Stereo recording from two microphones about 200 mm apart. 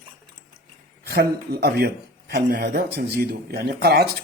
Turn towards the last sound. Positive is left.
turn(degrees=-50)  # may be behind; listen again after turning